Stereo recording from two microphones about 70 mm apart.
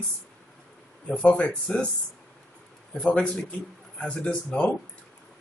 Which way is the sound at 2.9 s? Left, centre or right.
Centre.